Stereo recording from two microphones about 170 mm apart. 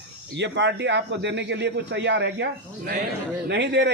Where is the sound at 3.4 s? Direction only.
85° right.